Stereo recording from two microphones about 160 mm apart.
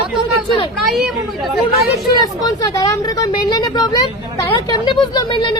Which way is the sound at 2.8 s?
25° left (ahead or behind).